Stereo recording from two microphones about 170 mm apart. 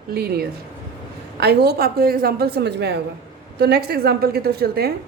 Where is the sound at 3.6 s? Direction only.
65° right (ahead or behind).